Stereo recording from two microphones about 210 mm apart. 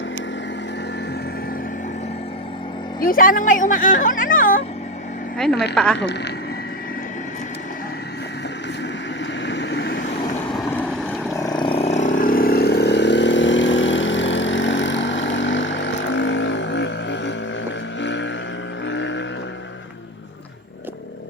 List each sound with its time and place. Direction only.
3.0 s speech: 40° left (ahead or behind)
5.4 s speech: centre (ahead or behind)
6.0 s speech: 55° left (ahead or behind)
9.5 s vehicle: 55° left (ahead or behind)
10.7 s boat: 10° left (ahead or behind)
11.3 s vehicle: 20° left (ahead or behind); by 17.3 s 55° left (ahead or behind)
18.0 s a sound: 60° left (ahead or behind)
18.9 s vehicle: 60° left (ahead or behind)